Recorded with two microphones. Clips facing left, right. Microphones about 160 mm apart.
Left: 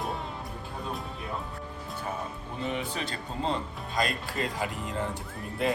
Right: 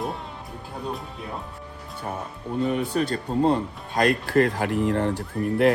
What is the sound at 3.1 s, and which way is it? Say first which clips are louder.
Speech: right 10 dB; 50° right (ahead or behind).